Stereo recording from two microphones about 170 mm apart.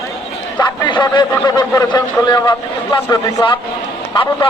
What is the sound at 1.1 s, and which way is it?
Speech, 25° left (ahead or behind).